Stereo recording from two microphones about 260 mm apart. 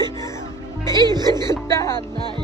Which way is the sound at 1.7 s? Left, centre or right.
Centre.